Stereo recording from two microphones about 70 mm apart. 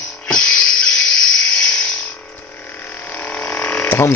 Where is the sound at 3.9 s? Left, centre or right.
Left.